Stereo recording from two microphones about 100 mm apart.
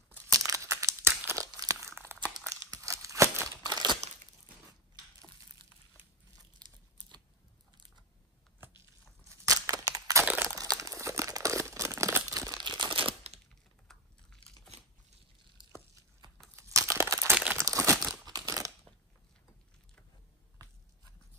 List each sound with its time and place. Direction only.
0.5 s crumpling: 30° right (ahead or behind)
2.3 s tearing: 35° right (ahead or behind)
3.7 s crumpling: 45° right (ahead or behind)
6.6 s crumpling: 40° right (ahead or behind)
8.5 s biting: 20° right (ahead or behind)
9.3 s a sound: 35° right (ahead or behind)
10.2 s a sound: 15° right (ahead or behind)
10.5 s crumpling: 35° right (ahead or behind); by 13.4 s 75° right (ahead or behind)
13.8 s typing: 5° left (ahead or behind)
16.5 s crumpling: 30° right (ahead or behind)